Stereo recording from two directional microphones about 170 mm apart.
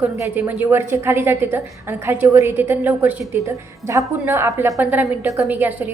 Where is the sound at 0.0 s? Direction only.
10° right (ahead or behind).